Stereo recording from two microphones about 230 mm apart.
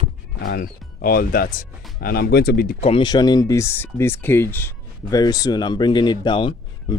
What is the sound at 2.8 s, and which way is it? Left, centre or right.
Speech, left.